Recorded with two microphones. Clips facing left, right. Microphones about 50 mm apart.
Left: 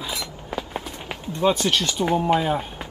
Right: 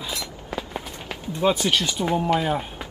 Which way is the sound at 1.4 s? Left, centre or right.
Centre.